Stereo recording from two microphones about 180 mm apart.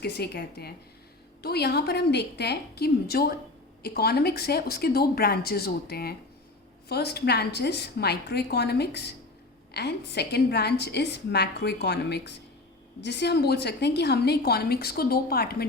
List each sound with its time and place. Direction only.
0.0 s a woman's voice: 65° left (ahead or behind)